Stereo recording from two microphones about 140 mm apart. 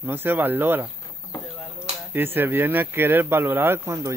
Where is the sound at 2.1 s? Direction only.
15° right (ahead or behind).